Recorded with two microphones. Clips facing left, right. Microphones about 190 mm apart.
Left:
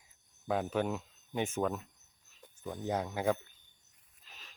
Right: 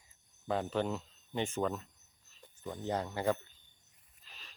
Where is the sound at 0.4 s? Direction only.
10° left (ahead or behind).